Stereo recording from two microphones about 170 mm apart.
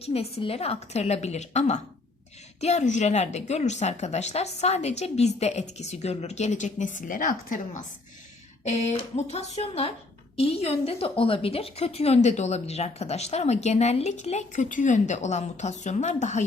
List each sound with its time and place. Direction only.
0.0 s a woman's voice: 35° left (ahead or behind)